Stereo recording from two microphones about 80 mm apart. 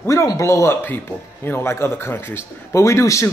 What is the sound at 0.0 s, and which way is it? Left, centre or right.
Speech, left.